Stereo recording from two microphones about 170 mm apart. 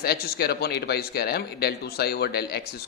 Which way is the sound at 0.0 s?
65° left (ahead or behind).